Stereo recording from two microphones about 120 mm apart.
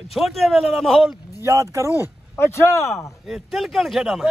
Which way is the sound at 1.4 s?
25° right (ahead or behind).